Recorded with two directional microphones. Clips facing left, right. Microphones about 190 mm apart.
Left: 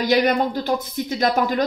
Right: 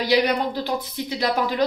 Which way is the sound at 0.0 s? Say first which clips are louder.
Left 2 dB; 45° left (ahead or behind).